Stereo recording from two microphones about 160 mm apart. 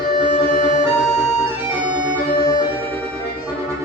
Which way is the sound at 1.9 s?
50° left (ahead or behind).